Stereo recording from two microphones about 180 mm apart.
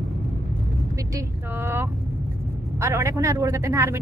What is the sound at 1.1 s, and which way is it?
Speech, 15° right (ahead or behind).